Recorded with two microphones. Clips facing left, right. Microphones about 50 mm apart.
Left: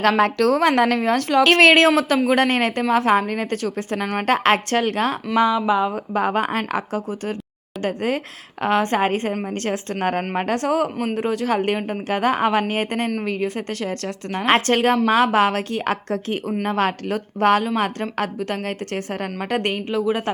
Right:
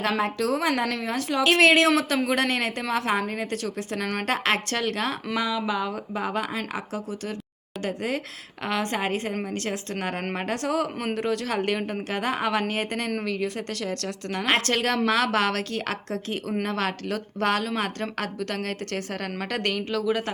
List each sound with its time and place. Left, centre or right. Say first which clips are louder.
0.2 s a woman's voice: left 8 dB; left
4.0 s a woman's voice: left 4 dB; left
4.3 s a woman's voice: left 8 dB; left
6.1 s a woman's voice: left 8 dB; left
11.1 s a woman's voice: left 5 dB; left